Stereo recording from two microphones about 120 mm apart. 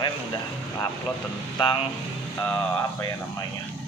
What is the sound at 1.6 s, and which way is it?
Speech, 45° left (ahead or behind).